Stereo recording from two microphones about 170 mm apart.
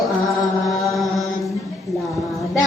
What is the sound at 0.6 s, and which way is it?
Mantra, centre (ahead or behind).